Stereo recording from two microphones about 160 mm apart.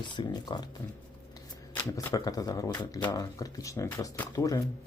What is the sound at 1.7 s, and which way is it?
Speech, 20° left (ahead or behind).